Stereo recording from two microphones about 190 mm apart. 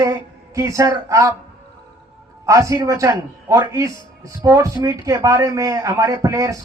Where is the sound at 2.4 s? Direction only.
15° right (ahead or behind).